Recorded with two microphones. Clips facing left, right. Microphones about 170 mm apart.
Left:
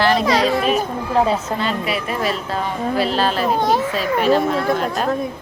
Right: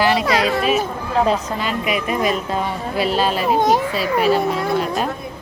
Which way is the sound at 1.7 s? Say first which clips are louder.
Right 1 dB; 35° left (ahead or behind).